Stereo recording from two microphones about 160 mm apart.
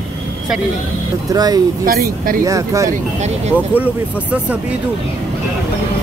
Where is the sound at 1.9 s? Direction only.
65° right (ahead or behind).